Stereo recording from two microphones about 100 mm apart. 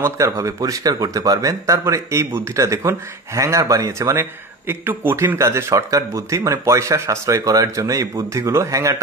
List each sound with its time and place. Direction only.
0.0 s speech: 30° right (ahead or behind)